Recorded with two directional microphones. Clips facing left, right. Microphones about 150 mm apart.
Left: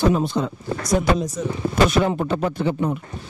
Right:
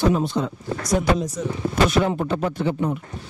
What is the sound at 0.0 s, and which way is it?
Speech, 15° left (ahead or behind).